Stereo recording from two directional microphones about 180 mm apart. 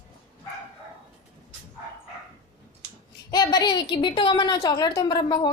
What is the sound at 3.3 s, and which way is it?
A woman's voice, 20° left (ahead or behind).